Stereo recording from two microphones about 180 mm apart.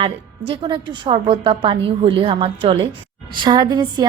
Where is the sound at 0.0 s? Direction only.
30° right (ahead or behind).